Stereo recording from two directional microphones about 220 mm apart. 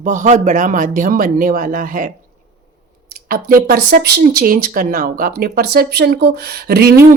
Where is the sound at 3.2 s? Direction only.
40° right (ahead or behind).